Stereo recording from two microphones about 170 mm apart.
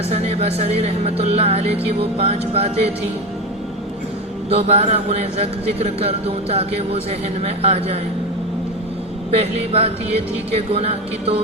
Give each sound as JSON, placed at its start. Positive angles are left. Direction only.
{"t": 0.1, "sound": "speech", "side_deg": -40}
{"t": 4.4, "sound": "speech", "side_deg": -35}
{"t": 9.3, "sound": "speech", "side_deg": -40}